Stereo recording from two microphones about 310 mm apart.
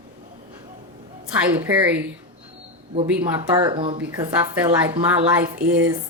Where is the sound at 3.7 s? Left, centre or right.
Centre.